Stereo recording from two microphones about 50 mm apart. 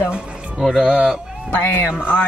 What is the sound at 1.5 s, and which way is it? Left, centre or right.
Speech, left.